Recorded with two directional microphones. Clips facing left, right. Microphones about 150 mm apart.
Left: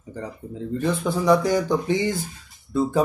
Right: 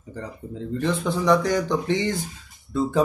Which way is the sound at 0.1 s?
10° left (ahead or behind).